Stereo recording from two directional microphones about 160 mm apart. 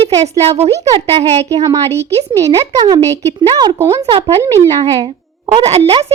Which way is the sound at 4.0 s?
40° right (ahead or behind).